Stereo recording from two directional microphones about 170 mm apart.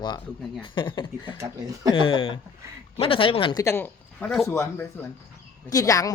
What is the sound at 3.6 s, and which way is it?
Speech, 10° left (ahead or behind).